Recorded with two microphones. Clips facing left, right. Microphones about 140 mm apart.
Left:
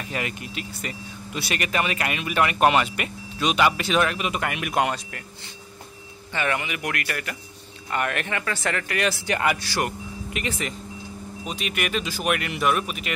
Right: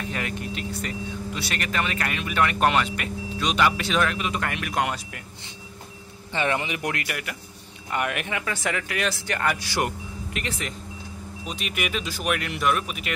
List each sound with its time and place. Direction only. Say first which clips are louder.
0.1 s speech: even; 5° left (ahead or behind)
4.8 s speech: left 2 dB; 5° right (ahead or behind)
6.3 s a man's voice: right 1 dB; 25° right (ahead or behind)
7.1 s speech: left 1 dB; 10° right (ahead or behind)
9.2 s speech: left 2 dB; 10° left (ahead or behind)
9.6 s a man's voice: even; 20° right (ahead or behind)
10.3 s speech: left 3 dB; 5° left (ahead or behind)